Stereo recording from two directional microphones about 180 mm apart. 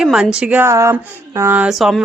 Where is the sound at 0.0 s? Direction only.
5° right (ahead or behind).